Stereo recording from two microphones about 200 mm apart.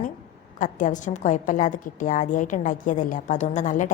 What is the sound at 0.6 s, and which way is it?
A woman's voice, 40° left (ahead or behind).